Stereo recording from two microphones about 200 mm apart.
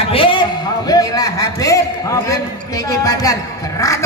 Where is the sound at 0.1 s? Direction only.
25° left (ahead or behind).